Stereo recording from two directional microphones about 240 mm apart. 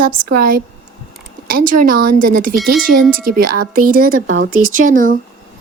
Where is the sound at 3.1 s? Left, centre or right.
Right.